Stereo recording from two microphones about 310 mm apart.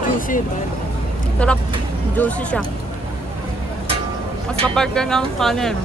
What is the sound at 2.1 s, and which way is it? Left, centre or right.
Speech, centre.